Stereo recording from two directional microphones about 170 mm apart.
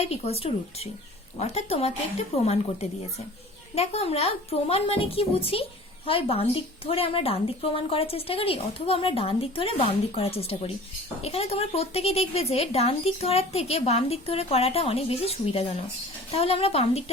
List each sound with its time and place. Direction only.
0.0 s a woman's voice: 35° left (ahead or behind)
3.8 s a woman's voice: 35° left (ahead or behind)